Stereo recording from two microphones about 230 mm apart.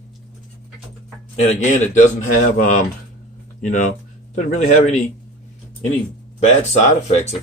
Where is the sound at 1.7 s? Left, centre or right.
Left.